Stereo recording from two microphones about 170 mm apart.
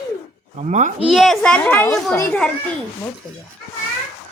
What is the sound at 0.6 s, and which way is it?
Speech, 45° right (ahead or behind).